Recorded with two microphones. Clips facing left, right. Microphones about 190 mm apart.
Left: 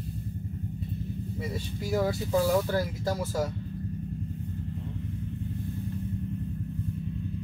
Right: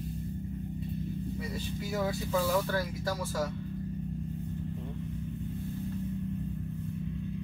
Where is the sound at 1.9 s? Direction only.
30° left (ahead or behind).